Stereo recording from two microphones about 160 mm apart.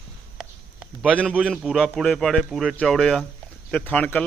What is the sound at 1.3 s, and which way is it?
A man's voice, 5° right (ahead or behind).